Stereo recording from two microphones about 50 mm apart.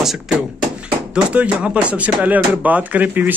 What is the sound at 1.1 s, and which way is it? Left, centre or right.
Speech, right.